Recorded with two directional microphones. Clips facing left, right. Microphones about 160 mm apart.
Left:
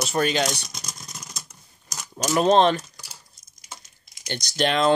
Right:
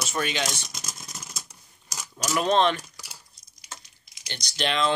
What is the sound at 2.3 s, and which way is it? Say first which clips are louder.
Speech: left 4 dB; 35° left (ahead or behind).